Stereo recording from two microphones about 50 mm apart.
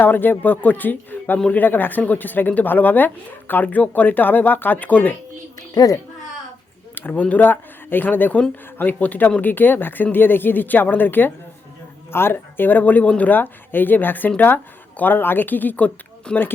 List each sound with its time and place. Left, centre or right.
0.0 s speech: left
6.9 s speech: left
16.3 s speech: centre